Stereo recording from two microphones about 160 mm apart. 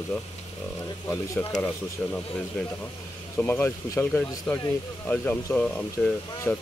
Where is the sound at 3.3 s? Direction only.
10° left (ahead or behind).